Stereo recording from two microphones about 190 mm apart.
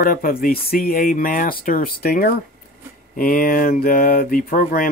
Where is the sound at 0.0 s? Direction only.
45° left (ahead or behind).